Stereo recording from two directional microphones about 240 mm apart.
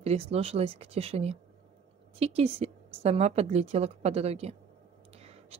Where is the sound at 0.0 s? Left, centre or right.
Right.